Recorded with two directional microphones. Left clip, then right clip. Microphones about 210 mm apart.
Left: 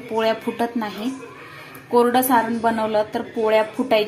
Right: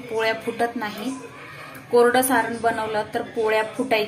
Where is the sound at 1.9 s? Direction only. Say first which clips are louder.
Left 1 dB; 15° left (ahead or behind).